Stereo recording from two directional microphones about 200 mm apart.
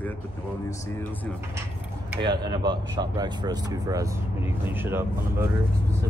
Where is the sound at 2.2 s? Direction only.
25° right (ahead or behind).